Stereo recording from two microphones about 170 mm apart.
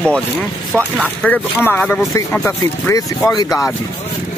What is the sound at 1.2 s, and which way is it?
Speech, 10° left (ahead or behind).